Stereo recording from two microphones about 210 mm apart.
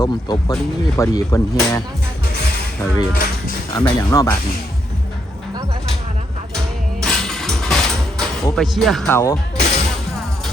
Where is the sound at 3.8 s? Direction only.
15° left (ahead or behind).